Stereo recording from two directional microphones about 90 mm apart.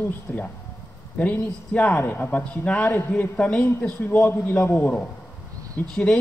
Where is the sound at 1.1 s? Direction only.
15° left (ahead or behind).